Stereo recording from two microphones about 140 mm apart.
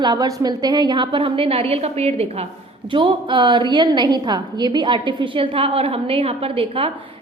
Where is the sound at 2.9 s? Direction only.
35° right (ahead or behind).